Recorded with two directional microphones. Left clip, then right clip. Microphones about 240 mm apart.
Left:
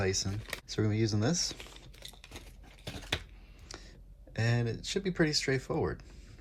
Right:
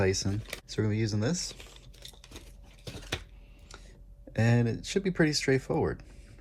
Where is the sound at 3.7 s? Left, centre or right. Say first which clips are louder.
Left 3 dB; left.